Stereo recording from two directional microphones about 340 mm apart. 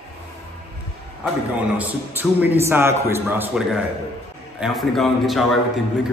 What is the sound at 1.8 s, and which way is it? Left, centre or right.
A man's voice, centre.